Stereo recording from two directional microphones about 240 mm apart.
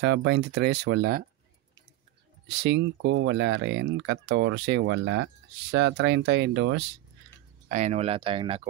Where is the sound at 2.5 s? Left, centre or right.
Right.